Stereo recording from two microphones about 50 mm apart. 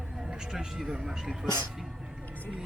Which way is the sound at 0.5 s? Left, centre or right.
Centre.